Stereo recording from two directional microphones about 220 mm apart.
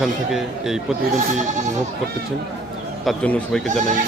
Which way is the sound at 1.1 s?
35° right (ahead or behind).